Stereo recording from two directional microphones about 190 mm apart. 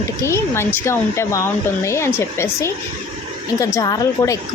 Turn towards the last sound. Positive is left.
turn(degrees=20)  # may be behind; listen again after turning